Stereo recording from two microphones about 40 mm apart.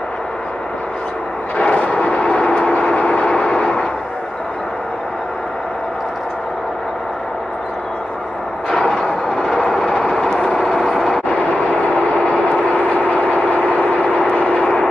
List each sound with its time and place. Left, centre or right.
1.6 s vehicle: left
3.0 s train: centre
8.6 s train: centre
10.7 s vehicle: centre
12.3 s vehicle: left